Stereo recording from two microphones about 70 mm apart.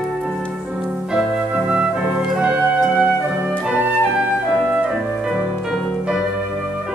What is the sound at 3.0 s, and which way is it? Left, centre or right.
Music, centre.